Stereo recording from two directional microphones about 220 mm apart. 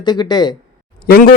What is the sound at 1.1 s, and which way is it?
Speech, 40° left (ahead or behind).